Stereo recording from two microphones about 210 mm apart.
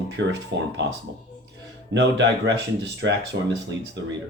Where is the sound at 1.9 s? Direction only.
55° right (ahead or behind).